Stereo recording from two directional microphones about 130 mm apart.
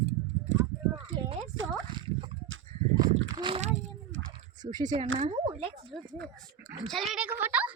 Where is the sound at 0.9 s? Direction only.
45° right (ahead or behind).